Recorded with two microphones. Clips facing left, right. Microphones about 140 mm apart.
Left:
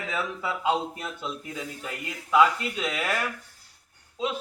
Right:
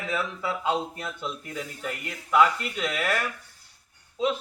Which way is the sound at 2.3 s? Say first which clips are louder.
Even; 5° left (ahead or behind).